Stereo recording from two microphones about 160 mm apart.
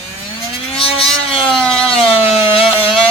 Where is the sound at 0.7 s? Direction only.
35° left (ahead or behind).